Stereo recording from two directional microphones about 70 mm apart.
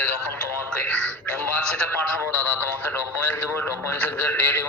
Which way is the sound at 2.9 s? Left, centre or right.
Left.